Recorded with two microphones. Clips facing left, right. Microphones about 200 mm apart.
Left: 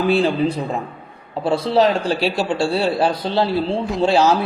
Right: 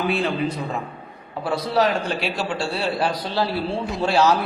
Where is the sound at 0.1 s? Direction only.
30° left (ahead or behind).